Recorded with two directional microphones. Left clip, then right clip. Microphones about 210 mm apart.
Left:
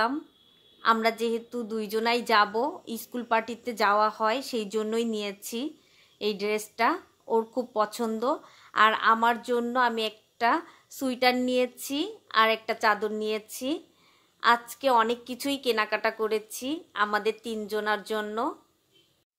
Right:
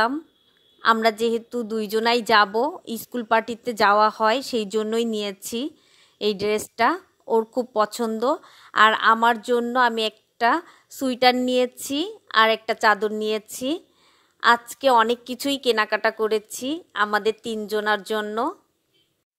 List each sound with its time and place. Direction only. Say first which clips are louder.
0.7 s speech: right 5 dB; 35° right (ahead or behind)